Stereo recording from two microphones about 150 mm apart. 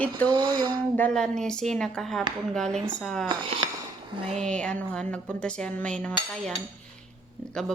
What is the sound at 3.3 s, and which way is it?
Speech, 35° right (ahead or behind).